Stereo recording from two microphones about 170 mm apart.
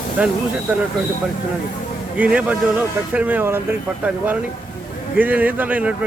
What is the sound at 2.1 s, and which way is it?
Speech, 10° right (ahead or behind).